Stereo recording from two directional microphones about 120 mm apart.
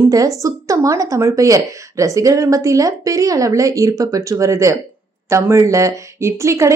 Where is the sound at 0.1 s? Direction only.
30° right (ahead or behind).